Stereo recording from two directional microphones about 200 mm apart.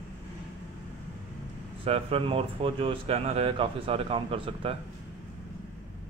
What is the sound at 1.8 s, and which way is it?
Speech, 30° right (ahead or behind).